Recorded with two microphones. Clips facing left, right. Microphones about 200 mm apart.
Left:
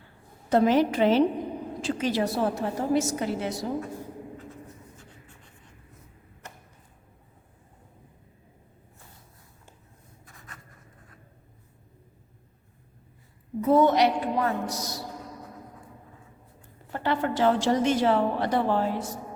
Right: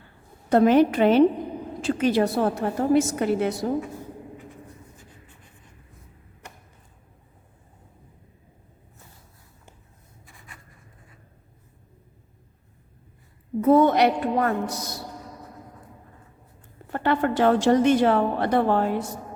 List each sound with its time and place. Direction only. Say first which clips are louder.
0.5 s a woman's voice: right 4 dB; 55° right (ahead or behind)
13.6 s a woman's voice: right 3 dB; 55° right (ahead or behind)
16.9 s a woman's voice: right 4 dB; 55° right (ahead or behind)